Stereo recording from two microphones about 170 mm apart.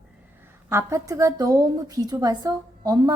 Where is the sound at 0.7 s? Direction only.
20° right (ahead or behind).